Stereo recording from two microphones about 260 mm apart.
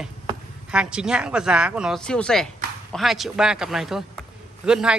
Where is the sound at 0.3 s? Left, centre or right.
Centre.